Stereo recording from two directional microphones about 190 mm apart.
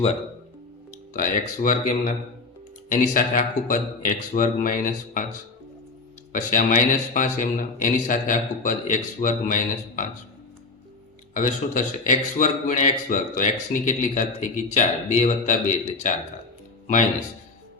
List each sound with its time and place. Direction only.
1.1 s speech: 45° left (ahead or behind)
6.3 s speech: 45° left (ahead or behind)
11.3 s a man's voice: 40° left (ahead or behind)